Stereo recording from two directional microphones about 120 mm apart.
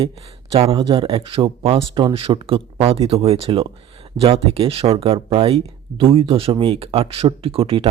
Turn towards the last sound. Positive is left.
turn(degrees=-50)  # may be behind; listen again after turning